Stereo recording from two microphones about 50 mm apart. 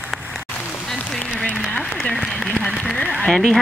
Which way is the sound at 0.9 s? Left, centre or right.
Centre.